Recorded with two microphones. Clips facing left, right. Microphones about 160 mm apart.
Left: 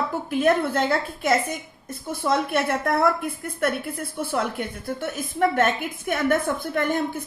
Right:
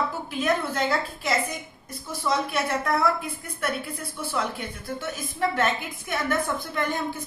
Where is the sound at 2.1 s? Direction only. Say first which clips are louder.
Left 4 dB; 55° left (ahead or behind).